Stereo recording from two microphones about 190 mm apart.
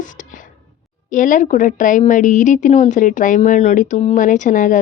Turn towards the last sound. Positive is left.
turn(degrees=45)  # may be behind; listen again after turning